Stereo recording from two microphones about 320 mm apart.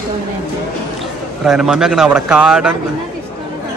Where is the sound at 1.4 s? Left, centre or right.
Centre.